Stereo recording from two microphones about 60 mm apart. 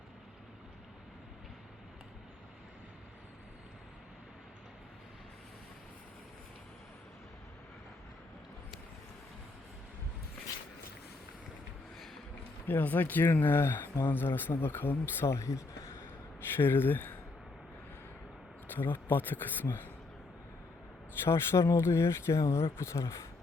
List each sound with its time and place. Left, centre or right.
12.6 s speech: left
15.3 s speech: left
16.6 s speech: left
18.7 s speech: left
21.2 s speech: left